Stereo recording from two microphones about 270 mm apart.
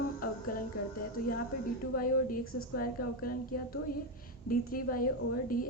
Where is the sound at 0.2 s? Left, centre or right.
Left.